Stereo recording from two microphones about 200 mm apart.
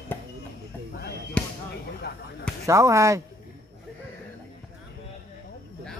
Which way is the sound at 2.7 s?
15° right (ahead or behind).